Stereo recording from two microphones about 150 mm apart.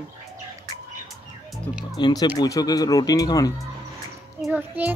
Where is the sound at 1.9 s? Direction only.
30° left (ahead or behind).